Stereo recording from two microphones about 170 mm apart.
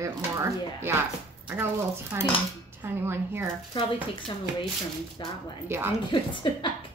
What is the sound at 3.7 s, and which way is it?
Speech, 30° left (ahead or behind).